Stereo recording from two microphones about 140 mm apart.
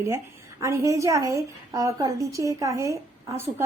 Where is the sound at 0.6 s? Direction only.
20° right (ahead or behind).